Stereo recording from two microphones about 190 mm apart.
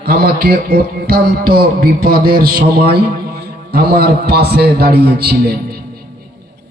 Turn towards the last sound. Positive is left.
turn(degrees=-55)  # may be behind; listen again after turning